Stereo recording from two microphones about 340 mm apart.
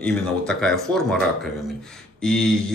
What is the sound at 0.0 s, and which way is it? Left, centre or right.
Speech, centre.